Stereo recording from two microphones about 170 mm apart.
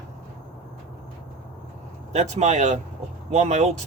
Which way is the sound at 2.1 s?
45° right (ahead or behind).